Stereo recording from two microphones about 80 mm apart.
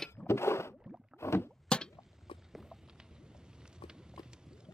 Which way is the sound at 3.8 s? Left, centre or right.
Centre.